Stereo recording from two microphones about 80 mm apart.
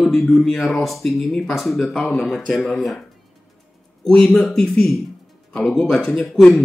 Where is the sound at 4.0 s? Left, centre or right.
Centre.